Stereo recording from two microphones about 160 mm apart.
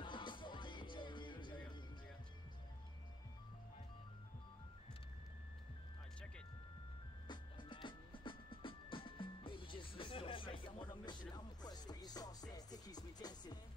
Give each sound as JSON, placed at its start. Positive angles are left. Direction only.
{"t": 0.0, "sound": "music", "side_deg": 30}
{"t": 7.2, "sound": "music", "side_deg": 30}